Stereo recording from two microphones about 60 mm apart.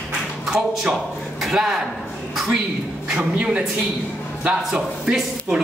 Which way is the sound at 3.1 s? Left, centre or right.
Centre.